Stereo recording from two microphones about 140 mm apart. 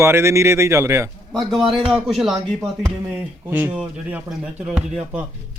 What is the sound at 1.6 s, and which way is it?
Speech, 35° right (ahead or behind).